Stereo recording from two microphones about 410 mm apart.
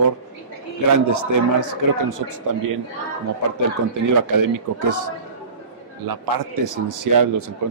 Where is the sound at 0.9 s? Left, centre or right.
Right.